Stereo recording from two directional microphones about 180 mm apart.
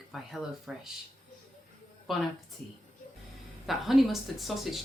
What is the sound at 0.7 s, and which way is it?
Speech, 5° right (ahead or behind).